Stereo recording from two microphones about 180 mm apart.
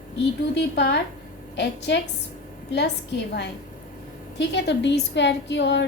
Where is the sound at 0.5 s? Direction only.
75° left (ahead or behind).